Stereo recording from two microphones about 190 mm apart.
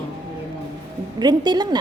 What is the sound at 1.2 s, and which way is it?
Speech, 20° right (ahead or behind).